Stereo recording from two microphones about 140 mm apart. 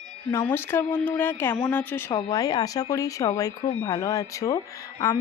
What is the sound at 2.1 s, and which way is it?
Speech, 25° left (ahead or behind).